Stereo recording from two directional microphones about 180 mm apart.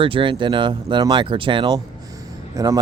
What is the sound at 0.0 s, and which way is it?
Speech, 30° right (ahead or behind).